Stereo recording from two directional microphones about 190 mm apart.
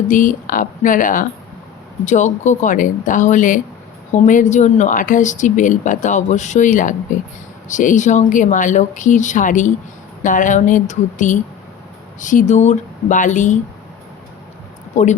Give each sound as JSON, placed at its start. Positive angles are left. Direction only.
{"t": 0.1, "sound": "speech", "side_deg": 45}
{"t": 15.0, "sound": "speech", "side_deg": 35}